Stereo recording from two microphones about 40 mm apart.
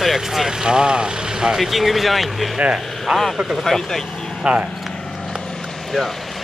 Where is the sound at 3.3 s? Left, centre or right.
Centre.